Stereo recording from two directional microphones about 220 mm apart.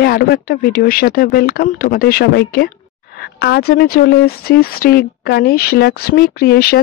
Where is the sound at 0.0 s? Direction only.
45° left (ahead or behind).